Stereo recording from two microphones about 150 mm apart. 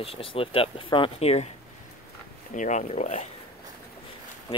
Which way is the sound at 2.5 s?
55° left (ahead or behind).